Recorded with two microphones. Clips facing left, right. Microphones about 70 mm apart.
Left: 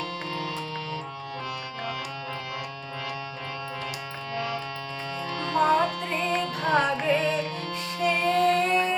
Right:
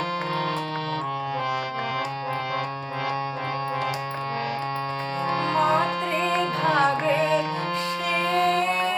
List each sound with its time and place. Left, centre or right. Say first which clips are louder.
5.3 s music: right 1 dB; right
8.1 s music: right 1 dB; right